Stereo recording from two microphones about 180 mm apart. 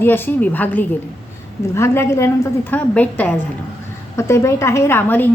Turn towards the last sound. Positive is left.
turn(degrees=10)  # may be behind; listen again after turning